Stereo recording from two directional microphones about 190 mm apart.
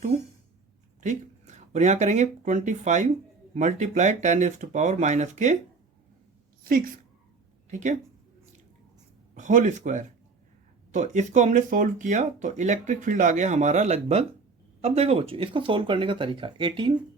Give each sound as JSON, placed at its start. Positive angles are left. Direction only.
{"t": 1.0, "sound": "speech", "side_deg": -40}
{"t": 6.7, "sound": "speech", "side_deg": -50}
{"t": 7.7, "sound": "speech", "side_deg": -40}
{"t": 9.3, "sound": "speech", "side_deg": -40}